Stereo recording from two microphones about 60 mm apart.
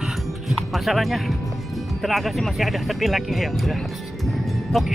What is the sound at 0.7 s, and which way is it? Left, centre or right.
Speech, centre.